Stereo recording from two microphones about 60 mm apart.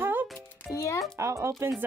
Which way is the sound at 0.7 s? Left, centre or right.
Left.